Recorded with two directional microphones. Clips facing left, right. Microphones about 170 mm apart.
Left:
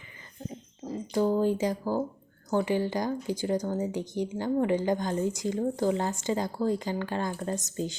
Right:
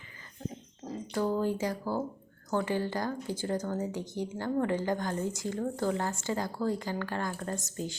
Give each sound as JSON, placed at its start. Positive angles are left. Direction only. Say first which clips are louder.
{"t": 1.1, "sound": "speech", "louder": "left 4 dB", "side_deg": 20}